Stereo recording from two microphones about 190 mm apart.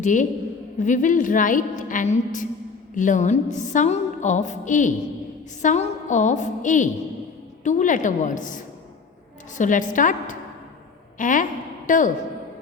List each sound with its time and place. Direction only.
0.0 s a woman's voice: 40° left (ahead or behind)
9.6 s a woman's voice: 45° left (ahead or behind)